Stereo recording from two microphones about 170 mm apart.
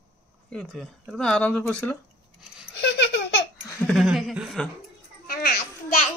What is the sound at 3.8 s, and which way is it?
Speech, centre (ahead or behind).